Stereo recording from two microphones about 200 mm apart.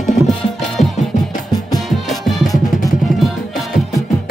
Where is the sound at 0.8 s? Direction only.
35° left (ahead or behind).